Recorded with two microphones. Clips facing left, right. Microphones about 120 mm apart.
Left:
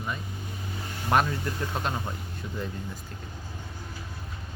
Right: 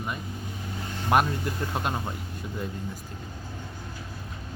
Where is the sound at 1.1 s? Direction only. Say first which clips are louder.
Right 1 dB; 10° right (ahead or behind).